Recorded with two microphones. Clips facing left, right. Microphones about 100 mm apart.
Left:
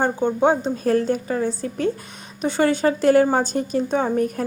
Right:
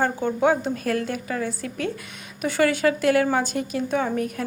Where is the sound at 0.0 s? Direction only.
20° left (ahead or behind).